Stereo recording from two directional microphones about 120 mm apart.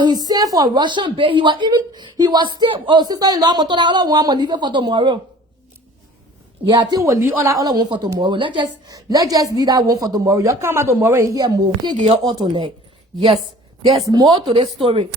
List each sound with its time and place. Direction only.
0.0 s a woman's voice: 35° right (ahead or behind)
6.7 s a woman's voice: 35° right (ahead or behind)
7.0 s a woman's voice: 25° right (ahead or behind); by 9.0 s 40° right (ahead or behind)
9.0 s a woman's voice: 30° right (ahead or behind)
14.0 s speech: 30° right (ahead or behind)
14.3 s speech: 45° right (ahead or behind)